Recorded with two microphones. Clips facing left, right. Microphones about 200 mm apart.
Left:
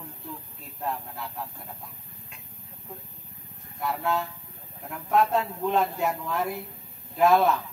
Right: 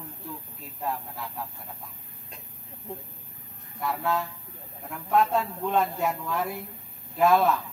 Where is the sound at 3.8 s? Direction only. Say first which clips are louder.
Even; centre (ahead or behind).